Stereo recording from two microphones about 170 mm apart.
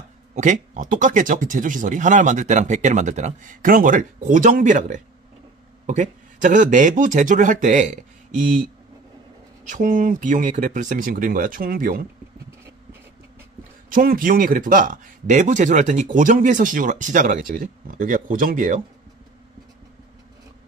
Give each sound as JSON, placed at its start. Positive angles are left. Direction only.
{"t": 0.3, "sound": "speech", "side_deg": -45}
{"t": 9.7, "sound": "speech", "side_deg": -50}
{"t": 13.9, "sound": "speech", "side_deg": -55}